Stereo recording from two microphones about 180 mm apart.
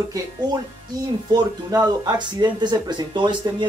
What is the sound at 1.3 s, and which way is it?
Speech, 20° right (ahead or behind).